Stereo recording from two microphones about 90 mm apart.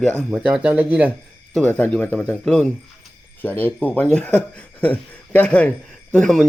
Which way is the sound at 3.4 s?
20° left (ahead or behind).